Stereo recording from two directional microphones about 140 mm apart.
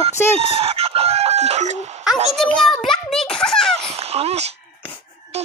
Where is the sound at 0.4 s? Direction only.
45° right (ahead or behind).